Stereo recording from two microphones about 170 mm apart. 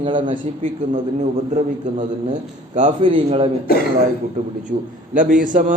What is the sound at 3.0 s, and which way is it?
Speech, 30° right (ahead or behind).